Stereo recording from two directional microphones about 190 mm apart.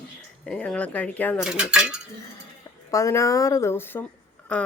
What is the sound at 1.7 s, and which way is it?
Speech, 5° right (ahead or behind).